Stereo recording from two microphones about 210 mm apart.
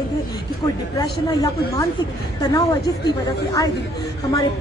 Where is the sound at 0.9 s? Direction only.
20° left (ahead or behind).